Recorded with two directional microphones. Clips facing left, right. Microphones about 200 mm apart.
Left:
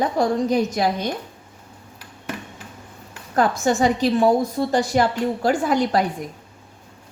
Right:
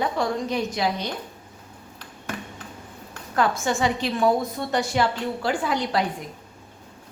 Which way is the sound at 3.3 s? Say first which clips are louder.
Left 4 dB; 40° left (ahead or behind).